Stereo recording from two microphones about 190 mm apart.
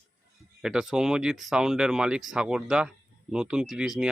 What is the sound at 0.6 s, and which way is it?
Speech, 5° right (ahead or behind).